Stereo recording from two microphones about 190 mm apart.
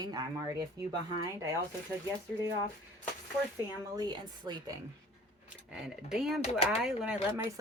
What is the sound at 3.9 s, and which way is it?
Speech, 20° right (ahead or behind).